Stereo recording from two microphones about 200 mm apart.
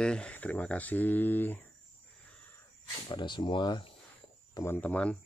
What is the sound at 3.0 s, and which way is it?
Speech, 25° left (ahead or behind).